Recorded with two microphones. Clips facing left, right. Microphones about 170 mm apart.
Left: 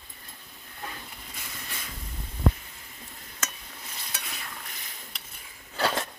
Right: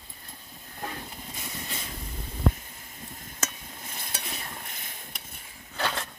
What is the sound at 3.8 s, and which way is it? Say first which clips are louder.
Stir: right 2 dB; 50° right (ahead or behind).